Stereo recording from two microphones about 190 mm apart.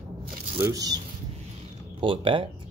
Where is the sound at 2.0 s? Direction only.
25° right (ahead or behind).